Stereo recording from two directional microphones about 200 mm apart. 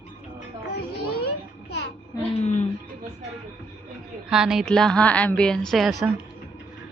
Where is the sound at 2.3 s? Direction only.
35° left (ahead or behind).